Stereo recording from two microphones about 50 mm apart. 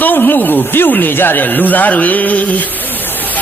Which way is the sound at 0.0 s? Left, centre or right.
Left.